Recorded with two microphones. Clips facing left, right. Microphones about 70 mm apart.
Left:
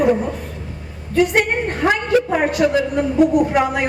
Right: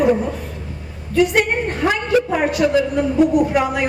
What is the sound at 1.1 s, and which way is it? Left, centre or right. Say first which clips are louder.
A woman's voice: even; left.